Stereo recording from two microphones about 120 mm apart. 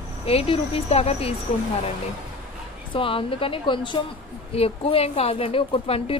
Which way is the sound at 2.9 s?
45° left (ahead or behind).